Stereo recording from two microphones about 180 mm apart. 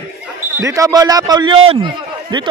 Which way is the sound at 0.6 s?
15° right (ahead or behind).